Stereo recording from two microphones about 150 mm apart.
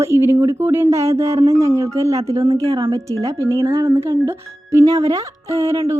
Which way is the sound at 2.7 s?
35° right (ahead or behind).